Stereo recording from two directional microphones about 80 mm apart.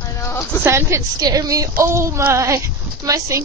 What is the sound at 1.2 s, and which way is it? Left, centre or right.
Speech, right.